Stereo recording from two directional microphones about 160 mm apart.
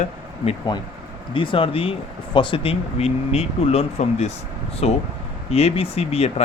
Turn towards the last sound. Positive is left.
turn(degrees=40)  # may be behind; listen again after turning